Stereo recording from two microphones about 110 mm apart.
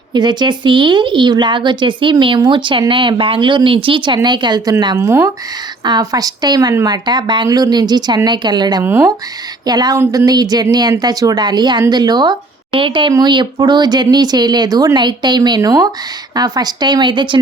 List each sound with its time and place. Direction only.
0.1 s speech: 40° right (ahead or behind)
4.9 s speech: 25° right (ahead or behind)
5.8 s speech: 40° right (ahead or behind)
8.8 s speech: 20° right (ahead or behind)
9.6 s speech: 35° right (ahead or behind)